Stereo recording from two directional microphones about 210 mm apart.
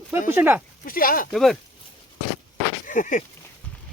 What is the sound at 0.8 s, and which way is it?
Speech, 40° left (ahead or behind).